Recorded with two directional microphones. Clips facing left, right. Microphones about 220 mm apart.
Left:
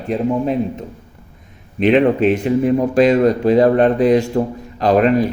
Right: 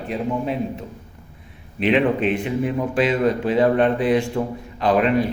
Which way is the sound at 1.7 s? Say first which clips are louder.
Left 5 dB; 40° left (ahead or behind).